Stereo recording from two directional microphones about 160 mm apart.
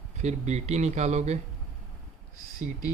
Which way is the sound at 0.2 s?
45° right (ahead or behind).